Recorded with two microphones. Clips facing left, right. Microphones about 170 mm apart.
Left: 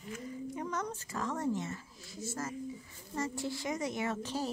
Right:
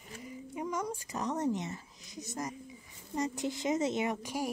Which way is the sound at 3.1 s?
20° right (ahead or behind).